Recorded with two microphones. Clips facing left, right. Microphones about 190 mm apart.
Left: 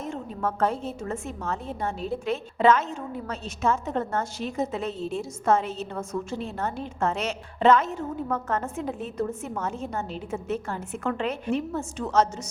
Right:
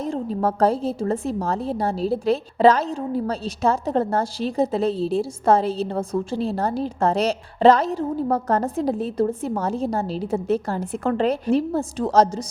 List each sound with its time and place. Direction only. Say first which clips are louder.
0.0 s a woman's voice: right 7 dB; 35° right (ahead or behind)